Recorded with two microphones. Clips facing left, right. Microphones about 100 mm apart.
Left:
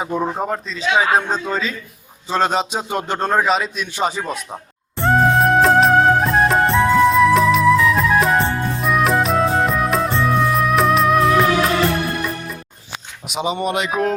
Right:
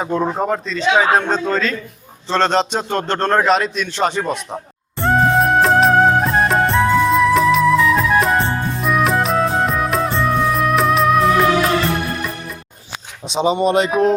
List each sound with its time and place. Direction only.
0.0 s a man's voice: 5° left (ahead or behind)
4.9 s music: centre (ahead or behind)
13.2 s speech: 30° right (ahead or behind)